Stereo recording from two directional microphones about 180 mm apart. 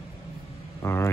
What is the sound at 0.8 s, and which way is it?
Vehicle, 15° left (ahead or behind).